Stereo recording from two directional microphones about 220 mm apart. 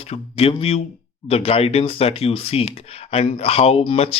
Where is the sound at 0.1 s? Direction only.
25° left (ahead or behind).